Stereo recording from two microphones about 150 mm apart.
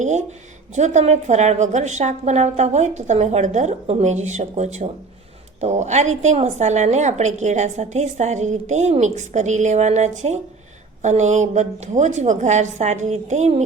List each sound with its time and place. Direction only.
0.8 s a woman's voice: 50° right (ahead or behind)